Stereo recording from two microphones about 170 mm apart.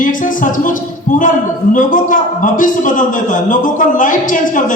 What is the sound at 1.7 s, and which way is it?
A man's voice, 50° left (ahead or behind).